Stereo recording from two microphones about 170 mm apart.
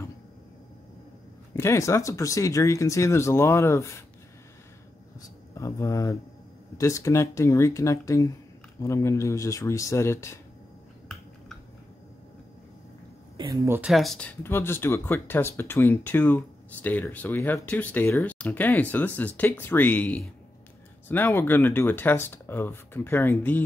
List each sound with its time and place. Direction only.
1.6 s speech: 15° left (ahead or behind)
5.5 s speech: 20° left (ahead or behind)
13.7 s speech: 10° right (ahead or behind); by 23.6 s 10° left (ahead or behind)